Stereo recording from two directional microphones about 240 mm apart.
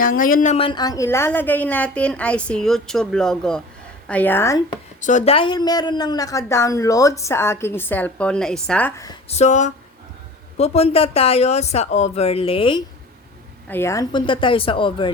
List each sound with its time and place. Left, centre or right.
0.0 s a woman's voice: left; by 4.6 s centre
4.9 s a woman's voice: left; by 9.1 s centre
9.3 s speech: left
13.7 s speech: centre